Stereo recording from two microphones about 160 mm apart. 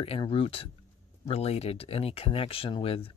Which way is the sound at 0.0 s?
35° left (ahead or behind).